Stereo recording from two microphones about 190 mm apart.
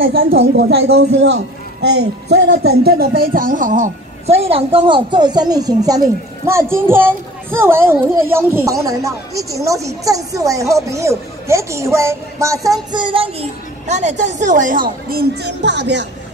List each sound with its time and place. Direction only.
0.1 s a man's voice: 50° right (ahead or behind)